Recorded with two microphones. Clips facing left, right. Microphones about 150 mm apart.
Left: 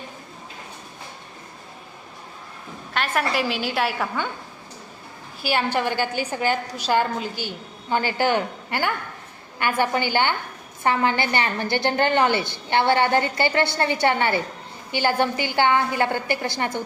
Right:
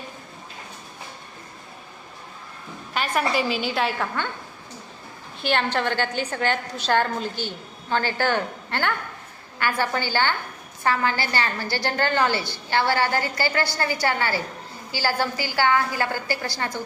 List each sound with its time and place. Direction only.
2.9 s a woman's voice: centre (ahead or behind)
5.4 s a woman's voice: 10° left (ahead or behind)